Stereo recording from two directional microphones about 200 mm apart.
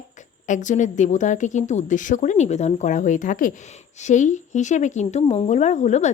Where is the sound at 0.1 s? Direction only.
40° left (ahead or behind).